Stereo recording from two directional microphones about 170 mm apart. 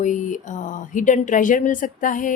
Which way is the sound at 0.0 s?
45° left (ahead or behind).